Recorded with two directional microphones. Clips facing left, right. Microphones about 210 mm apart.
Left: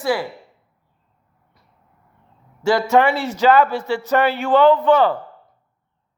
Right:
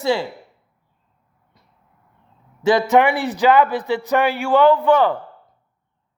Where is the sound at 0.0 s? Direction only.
25° right (ahead or behind).